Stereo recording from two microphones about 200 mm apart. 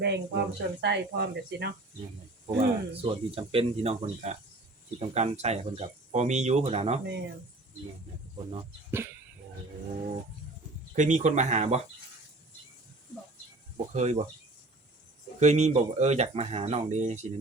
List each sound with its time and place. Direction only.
0.0 s speech: 55° right (ahead or behind)
2.6 s speech: 30° right (ahead or behind)
8.9 s speech: 10° right (ahead or behind)
10.9 s speech: 40° right (ahead or behind)
13.7 s speech: 35° right (ahead or behind)
15.4 s speech: 35° right (ahead or behind)